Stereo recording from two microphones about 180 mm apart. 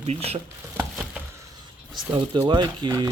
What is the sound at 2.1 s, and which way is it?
Speech, 20° right (ahead or behind).